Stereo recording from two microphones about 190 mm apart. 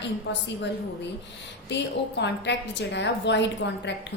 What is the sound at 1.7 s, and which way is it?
A woman's voice, 65° left (ahead or behind).